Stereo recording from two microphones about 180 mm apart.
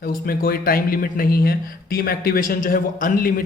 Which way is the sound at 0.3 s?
55° left (ahead or behind).